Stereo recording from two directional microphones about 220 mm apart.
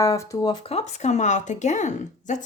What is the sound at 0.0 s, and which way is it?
Speech, 15° left (ahead or behind).